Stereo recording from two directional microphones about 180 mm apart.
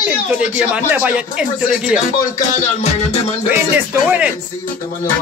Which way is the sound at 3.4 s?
10° right (ahead or behind).